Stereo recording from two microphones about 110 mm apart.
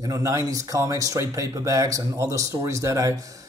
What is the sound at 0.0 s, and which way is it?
Speech, 30° right (ahead or behind).